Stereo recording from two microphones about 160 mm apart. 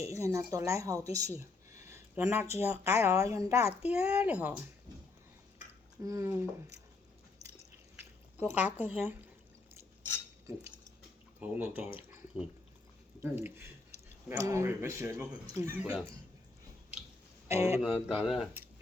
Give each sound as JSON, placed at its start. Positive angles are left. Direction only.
{"t": 0.0, "sound": "speech", "side_deg": -20}
{"t": 3.8, "sound": "speech", "side_deg": -5}
{"t": 6.0, "sound": "speech", "side_deg": -20}
{"t": 8.5, "sound": "speech", "side_deg": -10}
{"t": 11.3, "sound": "speech", "side_deg": -10}
{"t": 11.9, "sound": "drip", "side_deg": -10}
{"t": 13.1, "sound": "speech", "side_deg": -15}
{"t": 15.8, "sound": "speech", "side_deg": -5}
{"t": 17.5, "sound": "speech", "side_deg": -20}
{"t": 17.7, "sound": "speech", "side_deg": -5}